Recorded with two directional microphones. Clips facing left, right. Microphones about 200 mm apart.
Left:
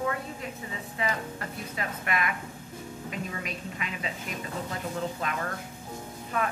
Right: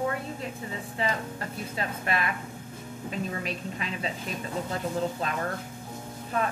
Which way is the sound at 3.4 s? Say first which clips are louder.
Right 3 dB; 30° right (ahead or behind).